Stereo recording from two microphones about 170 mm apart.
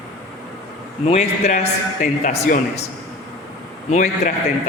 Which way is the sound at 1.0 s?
35° left (ahead or behind).